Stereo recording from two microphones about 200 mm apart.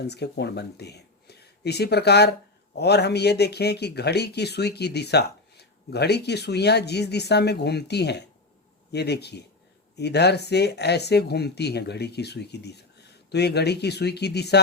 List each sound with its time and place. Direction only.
0.0 s speech: 55° left (ahead or behind)